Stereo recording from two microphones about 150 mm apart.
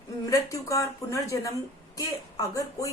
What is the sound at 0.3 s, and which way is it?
Speech, 20° left (ahead or behind).